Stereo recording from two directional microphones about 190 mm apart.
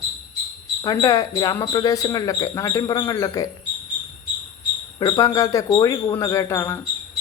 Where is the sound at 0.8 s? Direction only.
20° left (ahead or behind).